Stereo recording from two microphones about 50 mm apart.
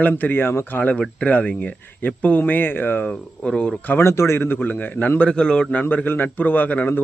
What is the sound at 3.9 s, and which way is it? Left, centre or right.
A man's voice, left.